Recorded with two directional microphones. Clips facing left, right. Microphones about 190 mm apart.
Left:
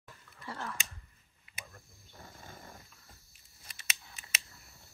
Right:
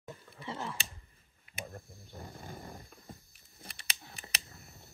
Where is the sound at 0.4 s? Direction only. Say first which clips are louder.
Right 2 dB; 20° right (ahead or behind).